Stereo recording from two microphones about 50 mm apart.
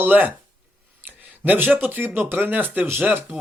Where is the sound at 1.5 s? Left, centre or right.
Right.